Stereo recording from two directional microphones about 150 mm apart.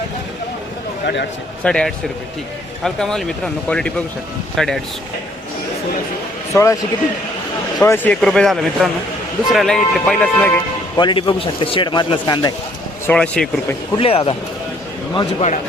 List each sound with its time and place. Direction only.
1.6 s speech: 5° left (ahead or behind)
6.5 s a man's voice: 20° left (ahead or behind)
7.8 s speech: 15° left (ahead or behind)
10.9 s speech: 35° left (ahead or behind)
13.1 s speech: 10° left (ahead or behind)
14.0 s speech: 40° left (ahead or behind)
15.4 s a man's voice: 50° left (ahead or behind)